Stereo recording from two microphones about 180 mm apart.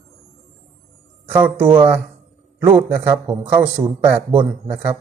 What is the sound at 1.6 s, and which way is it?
Speech, 30° right (ahead or behind).